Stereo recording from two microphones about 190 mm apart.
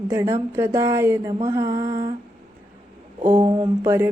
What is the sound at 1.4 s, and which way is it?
Mantra, 15° right (ahead or behind).